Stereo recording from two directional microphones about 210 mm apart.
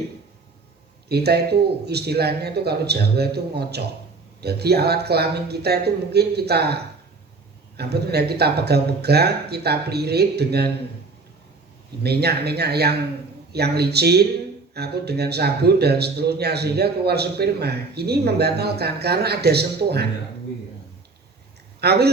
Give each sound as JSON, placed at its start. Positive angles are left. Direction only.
{"t": 1.0, "sound": "a man's voice", "side_deg": -50}
{"t": 7.8, "sound": "a man's voice", "side_deg": -50}
{"t": 12.0, "sound": "a man's voice", "side_deg": -50}
{"t": 21.8, "sound": "speech", "side_deg": -50}